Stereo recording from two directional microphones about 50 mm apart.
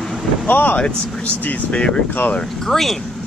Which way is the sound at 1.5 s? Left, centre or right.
Left.